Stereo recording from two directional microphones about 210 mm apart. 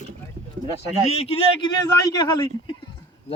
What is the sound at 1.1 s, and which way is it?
A man's voice, 30° left (ahead or behind).